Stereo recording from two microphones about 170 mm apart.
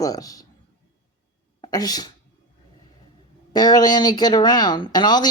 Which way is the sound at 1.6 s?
20° left (ahead or behind).